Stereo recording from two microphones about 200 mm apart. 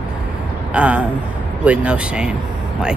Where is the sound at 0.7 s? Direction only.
5° right (ahead or behind).